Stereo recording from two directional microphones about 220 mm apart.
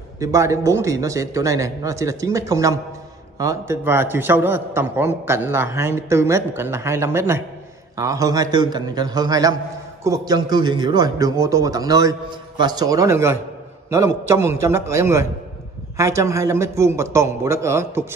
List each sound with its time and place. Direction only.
0.2 s a man's voice: 15° right (ahead or behind)